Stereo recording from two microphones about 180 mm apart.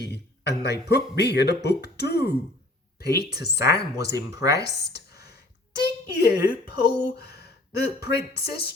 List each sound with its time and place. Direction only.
0.0 s speech: 65° left (ahead or behind)
4.6 s a sound: 65° left (ahead or behind)
5.8 s speech: 65° left (ahead or behind)